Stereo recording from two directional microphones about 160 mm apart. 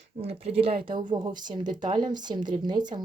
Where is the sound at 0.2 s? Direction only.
40° right (ahead or behind).